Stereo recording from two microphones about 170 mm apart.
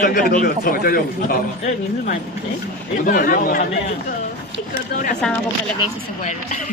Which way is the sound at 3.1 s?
55° left (ahead or behind).